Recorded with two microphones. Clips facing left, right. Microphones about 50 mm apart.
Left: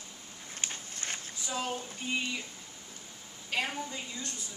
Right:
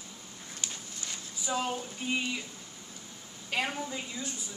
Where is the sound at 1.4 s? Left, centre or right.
Centre.